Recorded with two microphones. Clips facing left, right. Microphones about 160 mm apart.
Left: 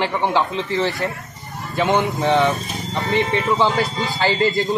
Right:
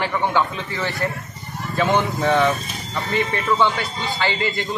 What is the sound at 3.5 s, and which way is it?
Speech, 35° left (ahead or behind).